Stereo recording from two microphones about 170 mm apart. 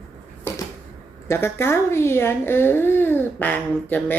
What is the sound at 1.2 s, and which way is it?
A woman's voice, 15° left (ahead or behind).